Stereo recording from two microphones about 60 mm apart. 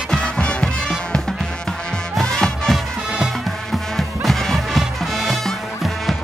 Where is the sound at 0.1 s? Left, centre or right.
Centre.